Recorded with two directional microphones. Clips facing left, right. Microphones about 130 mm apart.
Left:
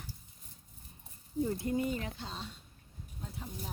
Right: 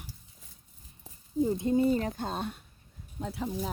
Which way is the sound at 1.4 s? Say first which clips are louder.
Right 7 dB; 20° right (ahead or behind).